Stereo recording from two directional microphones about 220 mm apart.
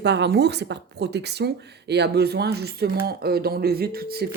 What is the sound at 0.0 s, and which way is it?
Speech, 50° right (ahead or behind).